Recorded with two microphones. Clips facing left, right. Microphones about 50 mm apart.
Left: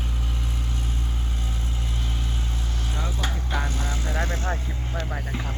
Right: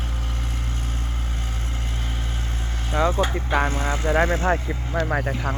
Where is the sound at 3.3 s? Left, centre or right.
Right.